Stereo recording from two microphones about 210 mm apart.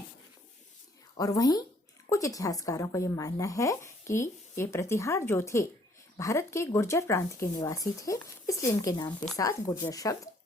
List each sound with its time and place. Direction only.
1.1 s speech: 15° left (ahead or behind)